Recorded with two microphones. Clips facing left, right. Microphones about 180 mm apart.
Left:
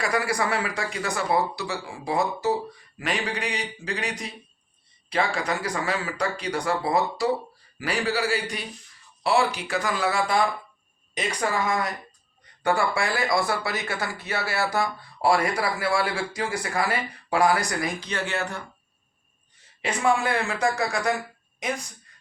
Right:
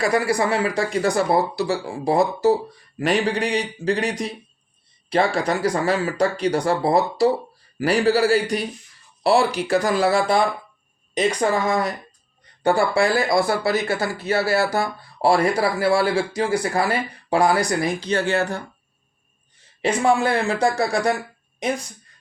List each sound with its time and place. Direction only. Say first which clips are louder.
0.0 s speech: right 6 dB; 30° right (ahead or behind)
12.6 s speech: right 6 dB; 30° right (ahead or behind)
19.8 s speech: right 5 dB; 30° right (ahead or behind)